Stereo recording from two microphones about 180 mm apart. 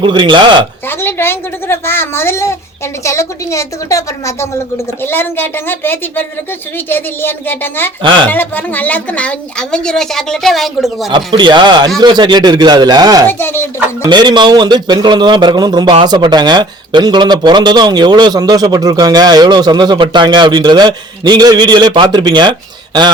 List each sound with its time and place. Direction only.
0.0 s a man's voice: 25° right (ahead or behind)
0.9 s a woman's voice: 10° left (ahead or behind)
11.1 s a man's voice: 25° right (ahead or behind)
13.2 s a woman's voice: 10° left (ahead or behind)
14.1 s a man's voice: 25° right (ahead or behind)